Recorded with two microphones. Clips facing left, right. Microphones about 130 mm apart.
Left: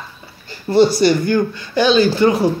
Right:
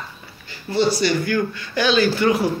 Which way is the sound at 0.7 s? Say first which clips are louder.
Left 7 dB; 45° left (ahead or behind).